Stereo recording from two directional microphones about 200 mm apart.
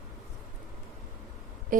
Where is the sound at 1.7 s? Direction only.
45° right (ahead or behind).